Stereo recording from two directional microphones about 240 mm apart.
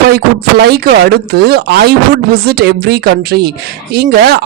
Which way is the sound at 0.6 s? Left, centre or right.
Right.